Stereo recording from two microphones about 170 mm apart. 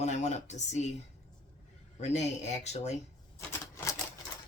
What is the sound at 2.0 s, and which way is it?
Speech, 40° left (ahead or behind).